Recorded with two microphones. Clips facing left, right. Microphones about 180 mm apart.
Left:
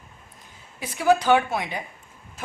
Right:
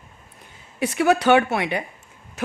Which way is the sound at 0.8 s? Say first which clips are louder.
Right 2 dB; 70° right (ahead or behind).